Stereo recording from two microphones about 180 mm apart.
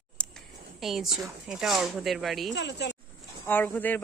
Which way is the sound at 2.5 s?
75° left (ahead or behind).